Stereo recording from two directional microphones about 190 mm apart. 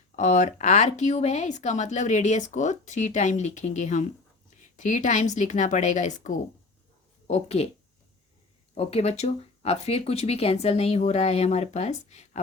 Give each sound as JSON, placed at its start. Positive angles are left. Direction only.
{"t": 0.2, "sound": "speech", "side_deg": 40}
{"t": 8.7, "sound": "speech", "side_deg": 35}